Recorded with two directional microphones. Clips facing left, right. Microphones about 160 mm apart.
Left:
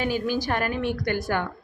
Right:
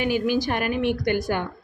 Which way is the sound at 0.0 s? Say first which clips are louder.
Right 3 dB; 15° right (ahead or behind).